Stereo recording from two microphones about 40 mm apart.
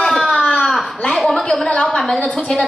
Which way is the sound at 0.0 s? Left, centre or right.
Centre.